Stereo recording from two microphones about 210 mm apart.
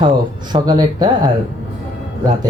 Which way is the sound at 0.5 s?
20° right (ahead or behind).